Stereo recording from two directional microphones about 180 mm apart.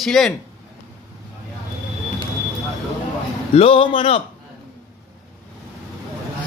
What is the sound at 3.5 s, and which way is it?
Speech, 30° left (ahead or behind).